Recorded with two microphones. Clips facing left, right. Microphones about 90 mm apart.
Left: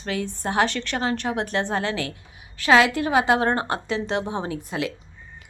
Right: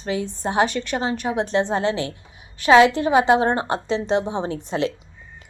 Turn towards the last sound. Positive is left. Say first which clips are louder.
# right 4 dB
turn(degrees=-30)  # may be behind; listen again after turning